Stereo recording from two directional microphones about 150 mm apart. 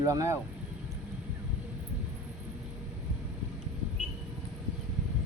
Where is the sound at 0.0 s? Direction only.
20° right (ahead or behind).